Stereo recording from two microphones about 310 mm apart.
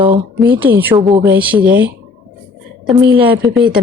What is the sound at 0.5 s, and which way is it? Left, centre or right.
A woman's voice, centre.